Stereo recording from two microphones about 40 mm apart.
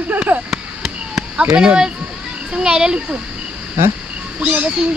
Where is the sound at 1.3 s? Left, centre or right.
Right.